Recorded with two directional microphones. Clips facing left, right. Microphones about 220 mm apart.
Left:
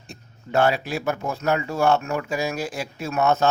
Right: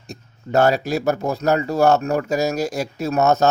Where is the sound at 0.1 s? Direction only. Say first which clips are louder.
Right 4 dB; 40° right (ahead or behind).